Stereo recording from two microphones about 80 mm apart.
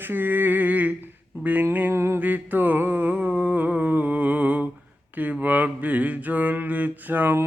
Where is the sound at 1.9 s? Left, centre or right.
Right.